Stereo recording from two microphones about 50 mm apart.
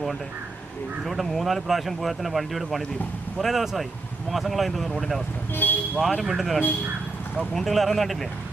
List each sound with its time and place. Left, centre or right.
1.0 s speech: centre
5.6 s speech: left
6.0 s speech: centre